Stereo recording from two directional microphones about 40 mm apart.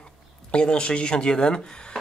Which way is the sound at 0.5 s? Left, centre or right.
Left.